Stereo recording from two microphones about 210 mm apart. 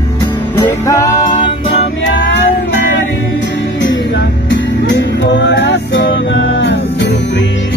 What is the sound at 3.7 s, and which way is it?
Music, 60° left (ahead or behind).